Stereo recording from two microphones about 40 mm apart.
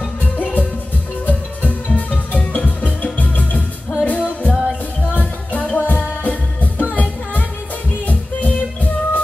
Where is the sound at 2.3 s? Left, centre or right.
Left.